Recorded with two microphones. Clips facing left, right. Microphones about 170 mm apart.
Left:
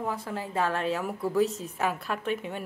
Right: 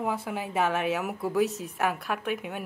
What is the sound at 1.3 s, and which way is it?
A woman's voice, centre (ahead or behind).